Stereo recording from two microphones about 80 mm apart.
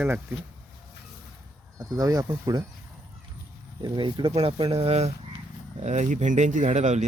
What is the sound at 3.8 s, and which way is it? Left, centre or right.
Speech, right.